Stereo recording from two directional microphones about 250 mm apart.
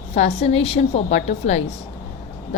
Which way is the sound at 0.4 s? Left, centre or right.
Left.